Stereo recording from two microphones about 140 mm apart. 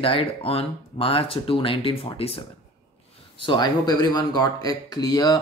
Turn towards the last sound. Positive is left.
turn(degrees=25)  # may be behind; listen again after turning